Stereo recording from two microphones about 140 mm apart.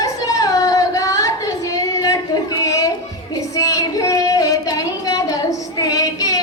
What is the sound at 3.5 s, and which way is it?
Singing, 25° left (ahead or behind).